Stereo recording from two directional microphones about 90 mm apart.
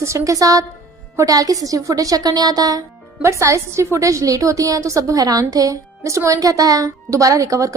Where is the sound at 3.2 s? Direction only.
35° right (ahead or behind).